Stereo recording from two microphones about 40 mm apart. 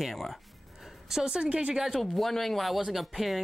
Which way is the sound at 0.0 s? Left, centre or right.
Centre.